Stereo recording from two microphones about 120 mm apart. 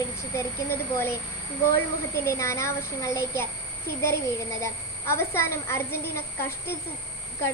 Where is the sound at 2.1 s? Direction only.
25° left (ahead or behind).